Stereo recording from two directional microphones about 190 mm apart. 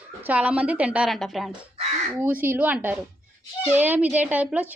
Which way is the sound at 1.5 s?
30° right (ahead or behind).